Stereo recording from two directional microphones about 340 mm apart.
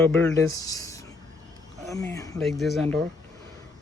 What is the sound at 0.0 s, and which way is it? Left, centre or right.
Speech, centre.